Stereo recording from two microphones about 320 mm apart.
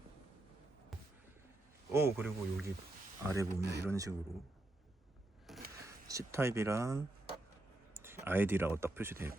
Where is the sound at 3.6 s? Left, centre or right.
Right.